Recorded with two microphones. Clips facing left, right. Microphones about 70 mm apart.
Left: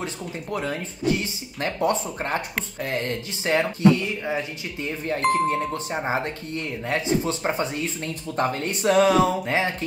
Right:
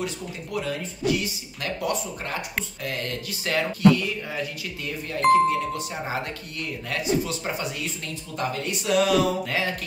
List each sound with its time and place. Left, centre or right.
0.0 s speech: left